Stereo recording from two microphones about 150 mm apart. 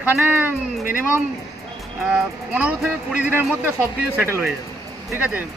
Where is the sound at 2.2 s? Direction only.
5° right (ahead or behind).